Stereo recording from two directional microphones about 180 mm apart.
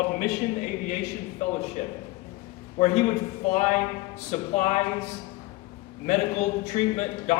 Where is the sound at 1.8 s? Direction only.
40° left (ahead or behind).